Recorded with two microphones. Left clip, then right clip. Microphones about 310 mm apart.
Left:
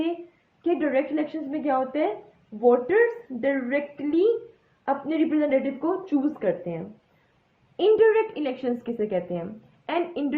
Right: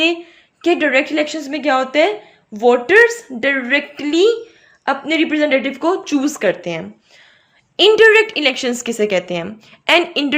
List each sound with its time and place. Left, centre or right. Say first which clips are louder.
0.6 s a woman's voice: right 9 dB; right